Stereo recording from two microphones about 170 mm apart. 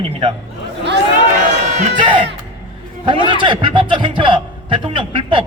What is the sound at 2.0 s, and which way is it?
Speech, 30° right (ahead or behind).